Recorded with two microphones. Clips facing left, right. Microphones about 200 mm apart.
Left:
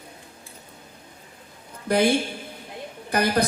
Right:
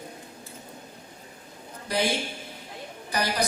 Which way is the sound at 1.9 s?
55° left (ahead or behind).